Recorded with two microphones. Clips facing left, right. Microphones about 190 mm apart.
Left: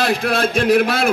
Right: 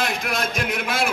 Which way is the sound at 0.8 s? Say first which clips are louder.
Left 7 dB; 65° left (ahead or behind).